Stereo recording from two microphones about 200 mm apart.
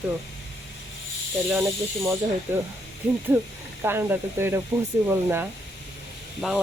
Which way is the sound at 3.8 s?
10° right (ahead or behind).